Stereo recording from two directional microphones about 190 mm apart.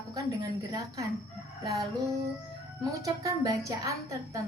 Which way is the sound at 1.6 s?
20° right (ahead or behind).